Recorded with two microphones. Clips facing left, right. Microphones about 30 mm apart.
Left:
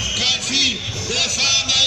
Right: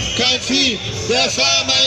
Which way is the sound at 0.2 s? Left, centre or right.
Centre.